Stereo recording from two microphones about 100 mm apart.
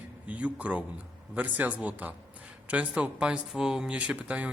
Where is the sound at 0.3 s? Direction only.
15° right (ahead or behind).